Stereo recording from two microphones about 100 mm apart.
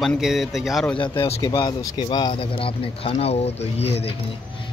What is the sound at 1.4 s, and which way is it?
Speech, 50° left (ahead or behind).